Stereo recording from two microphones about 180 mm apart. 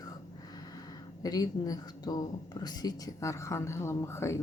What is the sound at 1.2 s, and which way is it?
A woman's voice, 20° left (ahead or behind).